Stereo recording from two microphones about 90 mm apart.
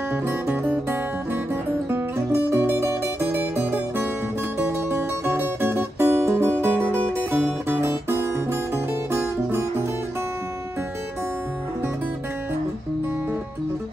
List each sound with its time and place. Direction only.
0.1 s music: 20° right (ahead or behind)